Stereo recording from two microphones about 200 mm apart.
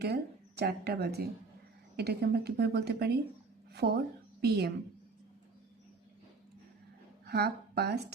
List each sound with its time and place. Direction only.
0.0 s a woman's voice: 55° right (ahead or behind)
7.3 s a woman's voice: 55° right (ahead or behind)